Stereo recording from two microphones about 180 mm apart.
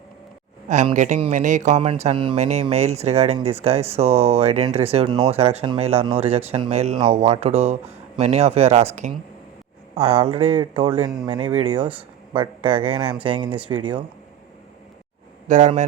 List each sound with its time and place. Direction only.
0.9 s speech: 45° right (ahead or behind); by 14.0 s 25° right (ahead or behind)
15.4 s speech: 40° right (ahead or behind)